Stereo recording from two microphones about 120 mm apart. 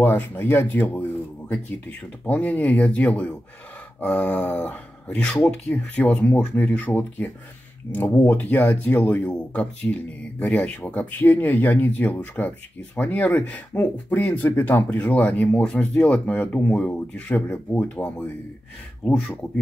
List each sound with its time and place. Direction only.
0.0 s speech: 15° left (ahead or behind)